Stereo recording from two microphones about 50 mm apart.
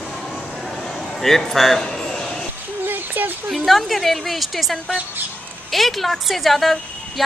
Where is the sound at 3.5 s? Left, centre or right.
Centre.